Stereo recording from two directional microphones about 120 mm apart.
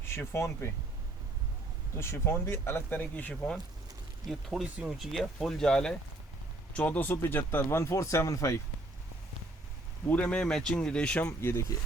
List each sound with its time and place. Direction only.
0.0 s speech: 20° left (ahead or behind)
2.0 s speech: 20° left (ahead or behind)
4.3 s speech: centre (ahead or behind); by 8.5 s 25° left (ahead or behind)
10.1 s speech: 10° left (ahead or behind)
11.3 s speech: 20° left (ahead or behind)